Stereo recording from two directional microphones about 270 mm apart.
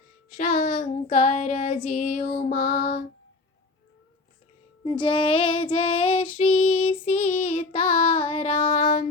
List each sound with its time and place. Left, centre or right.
0.3 s child singing: left
4.8 s female singing: centre